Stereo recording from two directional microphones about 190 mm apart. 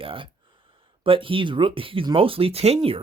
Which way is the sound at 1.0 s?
30° right (ahead or behind).